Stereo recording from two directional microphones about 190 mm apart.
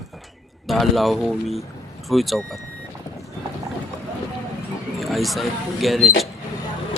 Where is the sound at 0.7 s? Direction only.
Centre (ahead or behind).